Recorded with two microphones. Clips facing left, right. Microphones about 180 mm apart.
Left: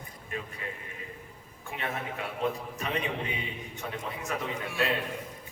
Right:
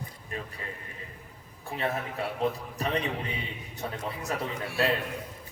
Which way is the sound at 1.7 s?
35° right (ahead or behind).